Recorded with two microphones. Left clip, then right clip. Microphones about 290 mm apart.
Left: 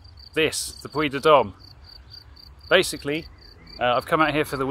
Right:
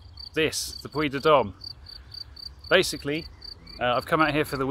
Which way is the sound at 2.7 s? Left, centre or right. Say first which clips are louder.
Left 2 dB; centre.